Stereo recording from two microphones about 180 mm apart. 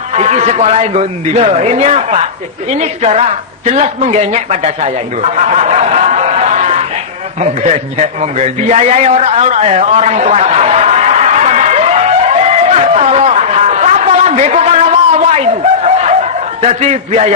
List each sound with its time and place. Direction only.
0.1 s a woman's voice: 40° right (ahead or behind)
5.4 s a sound: 40° right (ahead or behind)
16.6 s a woman's voice: 40° right (ahead or behind)